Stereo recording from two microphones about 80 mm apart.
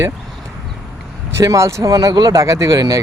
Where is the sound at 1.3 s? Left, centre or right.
Right.